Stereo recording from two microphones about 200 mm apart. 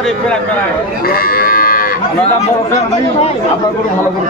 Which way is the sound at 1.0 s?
50° left (ahead or behind).